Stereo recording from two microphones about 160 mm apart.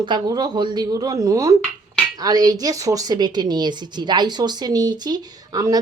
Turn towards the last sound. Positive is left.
turn(degrees=-25)  # may be behind; listen again after turning